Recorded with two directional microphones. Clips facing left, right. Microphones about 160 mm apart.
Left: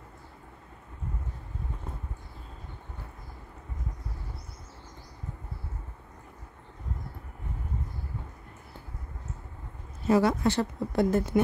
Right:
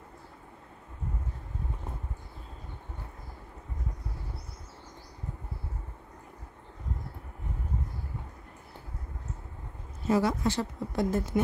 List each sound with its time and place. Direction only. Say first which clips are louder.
10.0 s speech: left 3 dB; 65° left (ahead or behind)